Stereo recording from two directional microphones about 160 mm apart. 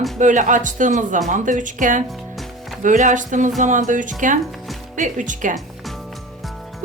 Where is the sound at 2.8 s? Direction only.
55° right (ahead or behind).